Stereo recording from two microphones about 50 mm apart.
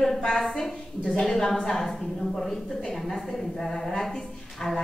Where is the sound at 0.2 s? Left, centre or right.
Centre.